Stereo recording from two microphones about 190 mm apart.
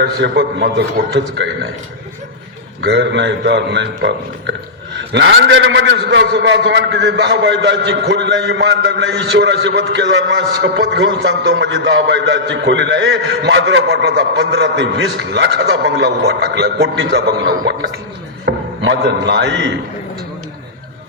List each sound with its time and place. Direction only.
0.0 s a man's voice: 65° right (ahead or behind)
2.8 s a man's voice: 70° right (ahead or behind)